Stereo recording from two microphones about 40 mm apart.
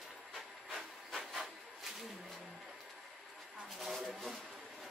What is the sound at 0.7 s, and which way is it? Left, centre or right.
Hiss, centre.